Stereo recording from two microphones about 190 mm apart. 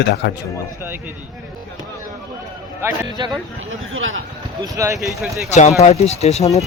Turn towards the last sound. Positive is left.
turn(degrees=35)  # may be behind; listen again after turning